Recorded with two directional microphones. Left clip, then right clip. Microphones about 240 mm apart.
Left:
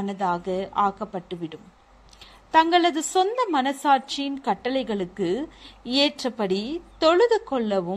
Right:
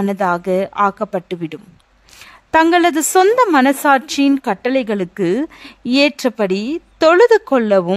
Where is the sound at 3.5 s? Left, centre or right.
Right.